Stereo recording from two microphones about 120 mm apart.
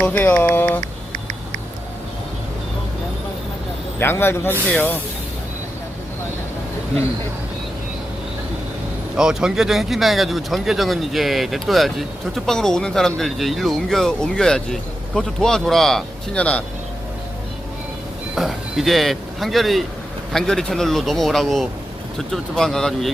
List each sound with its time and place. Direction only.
0.0 s speech: 15° left (ahead or behind)
4.0 s speech: 20° left (ahead or behind)
9.1 s speech: 5° right (ahead or behind); by 16.6 s 10° left (ahead or behind)
18.3 s speech: centre (ahead or behind)